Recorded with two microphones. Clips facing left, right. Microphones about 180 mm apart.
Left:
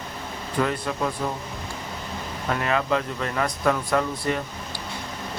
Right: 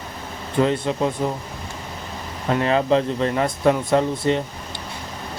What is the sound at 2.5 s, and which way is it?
Speech, 30° right (ahead or behind).